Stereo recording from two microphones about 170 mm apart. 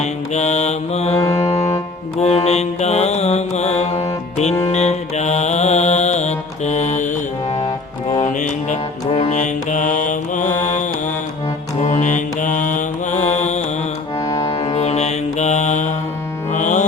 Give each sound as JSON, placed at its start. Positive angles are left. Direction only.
{"t": 0.0, "sound": "mantra", "side_deg": 40}
{"t": 8.2, "sound": "music", "side_deg": 50}
{"t": 11.8, "sound": "mantra", "side_deg": 45}
{"t": 14.2, "sound": "music", "side_deg": 20}
{"t": 14.5, "sound": "music", "side_deg": 40}